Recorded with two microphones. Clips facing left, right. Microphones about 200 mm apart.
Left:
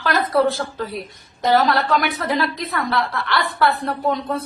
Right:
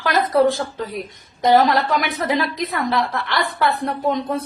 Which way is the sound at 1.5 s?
15° right (ahead or behind).